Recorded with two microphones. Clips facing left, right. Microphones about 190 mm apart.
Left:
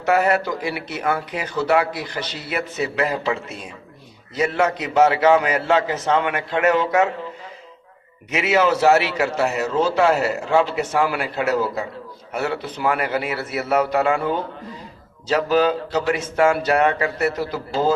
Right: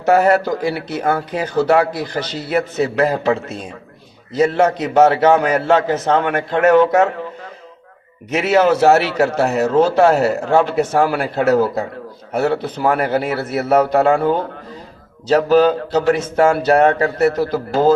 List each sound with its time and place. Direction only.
0.0 s speech: 45° right (ahead or behind)
4.4 s speech: 40° right (ahead or behind)
8.3 s speech: 45° right (ahead or behind)